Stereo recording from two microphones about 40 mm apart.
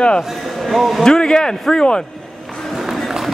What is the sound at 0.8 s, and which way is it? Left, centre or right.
Speech, centre.